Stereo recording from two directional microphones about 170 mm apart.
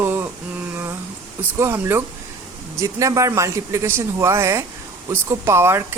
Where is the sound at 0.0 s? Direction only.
15° right (ahead or behind).